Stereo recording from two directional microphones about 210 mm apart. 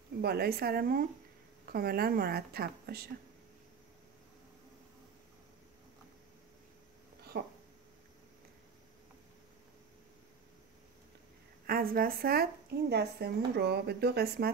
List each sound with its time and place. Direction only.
0.2 s speech: 50° right (ahead or behind)
7.3 s speech: 55° right (ahead or behind)
11.6 s speech: 45° right (ahead or behind)